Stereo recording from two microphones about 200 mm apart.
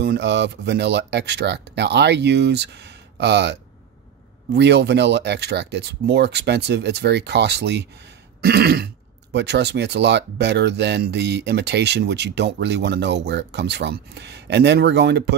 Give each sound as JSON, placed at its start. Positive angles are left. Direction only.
{"t": 0.0, "sound": "speech", "side_deg": -55}
{"t": 4.6, "sound": "speech", "side_deg": -60}